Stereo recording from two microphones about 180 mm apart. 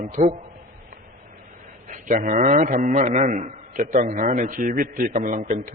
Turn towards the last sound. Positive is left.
turn(degrees=-50)  # may be behind; listen again after turning